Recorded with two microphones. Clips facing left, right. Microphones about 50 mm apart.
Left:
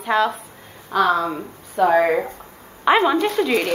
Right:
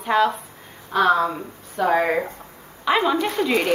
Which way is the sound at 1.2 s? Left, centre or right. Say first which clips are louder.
Left 1 dB; centre.